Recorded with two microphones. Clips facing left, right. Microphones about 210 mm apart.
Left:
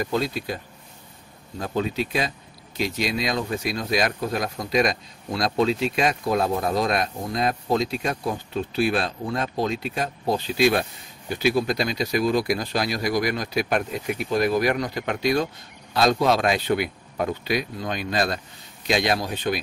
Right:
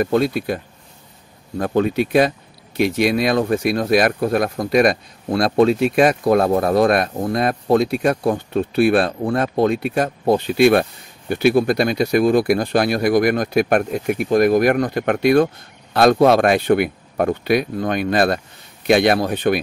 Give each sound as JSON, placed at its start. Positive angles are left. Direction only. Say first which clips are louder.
{"t": 0.0, "sound": "speech", "louder": "right 8 dB", "side_deg": -60}
{"t": 1.6, "sound": "speech", "louder": "right 8 dB", "side_deg": -60}